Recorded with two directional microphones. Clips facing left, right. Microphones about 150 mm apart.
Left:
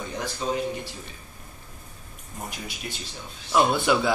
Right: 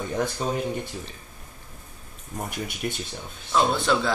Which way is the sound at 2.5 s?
55° right (ahead or behind).